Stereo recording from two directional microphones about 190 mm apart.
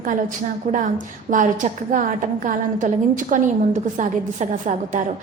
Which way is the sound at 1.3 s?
45° right (ahead or behind).